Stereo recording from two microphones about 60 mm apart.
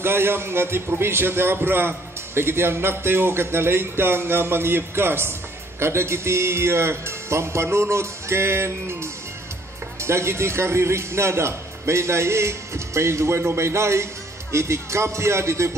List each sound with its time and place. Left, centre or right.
0.0 s a man's voice: right